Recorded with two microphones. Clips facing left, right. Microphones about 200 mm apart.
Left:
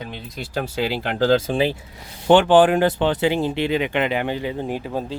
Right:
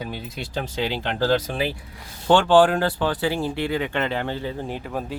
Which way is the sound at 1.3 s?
25° left (ahead or behind).